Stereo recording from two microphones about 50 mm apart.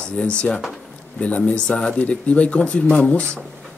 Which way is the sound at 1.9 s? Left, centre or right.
Left.